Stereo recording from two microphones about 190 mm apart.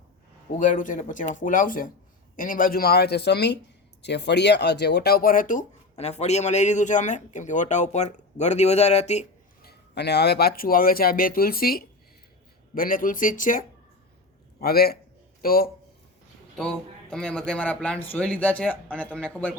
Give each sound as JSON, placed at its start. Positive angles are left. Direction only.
{"t": 0.6, "sound": "speech", "side_deg": 45}
{"t": 9.6, "sound": "speech", "side_deg": 60}
{"t": 14.6, "sound": "speech", "side_deg": 55}
{"t": 16.6, "sound": "speech", "side_deg": 5}